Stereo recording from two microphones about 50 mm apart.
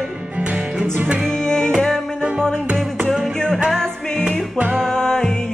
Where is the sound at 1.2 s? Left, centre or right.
Centre.